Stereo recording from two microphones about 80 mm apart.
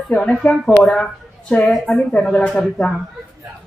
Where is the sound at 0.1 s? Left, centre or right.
Centre.